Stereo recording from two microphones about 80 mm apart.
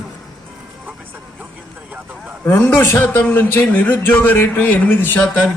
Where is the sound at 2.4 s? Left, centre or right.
Left.